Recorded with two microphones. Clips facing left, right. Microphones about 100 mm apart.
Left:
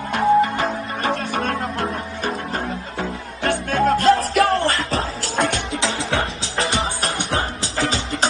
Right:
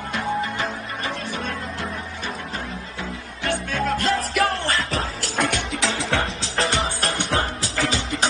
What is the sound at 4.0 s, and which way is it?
Music, 60° left (ahead or behind).